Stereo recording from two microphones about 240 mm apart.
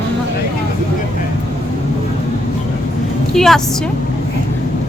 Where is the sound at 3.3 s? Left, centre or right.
Centre.